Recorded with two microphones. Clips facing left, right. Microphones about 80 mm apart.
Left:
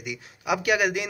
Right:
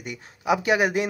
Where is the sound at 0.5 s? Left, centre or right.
Right.